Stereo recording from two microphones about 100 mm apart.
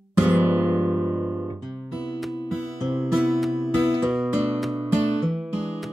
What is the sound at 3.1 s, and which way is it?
Music, centre (ahead or behind).